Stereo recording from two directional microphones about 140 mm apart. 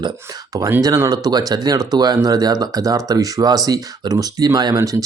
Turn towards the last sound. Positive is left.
turn(degrees=-25)  # may be behind; listen again after turning